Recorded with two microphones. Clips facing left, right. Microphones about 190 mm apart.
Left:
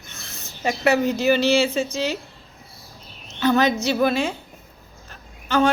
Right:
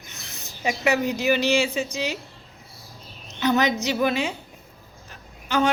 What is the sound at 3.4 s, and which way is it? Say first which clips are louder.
Speech: left 3 dB; 15° right (ahead or behind).